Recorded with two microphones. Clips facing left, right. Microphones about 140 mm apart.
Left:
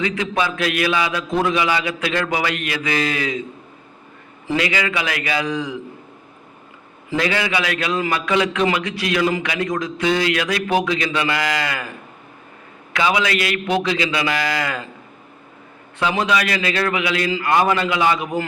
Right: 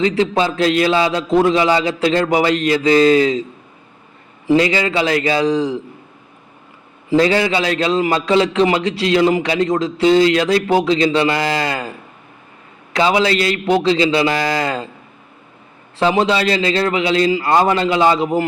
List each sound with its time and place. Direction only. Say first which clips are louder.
0.0 s a man's voice: right 6 dB; 30° right (ahead or behind)
4.5 s a man's voice: right 6 dB; 30° right (ahead or behind)
7.1 s a man's voice: right 7 dB; 30° right (ahead or behind)
16.0 s a man's voice: right 5 dB; 30° right (ahead or behind)